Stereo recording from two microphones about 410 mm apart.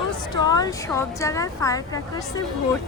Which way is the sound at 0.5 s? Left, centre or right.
Centre.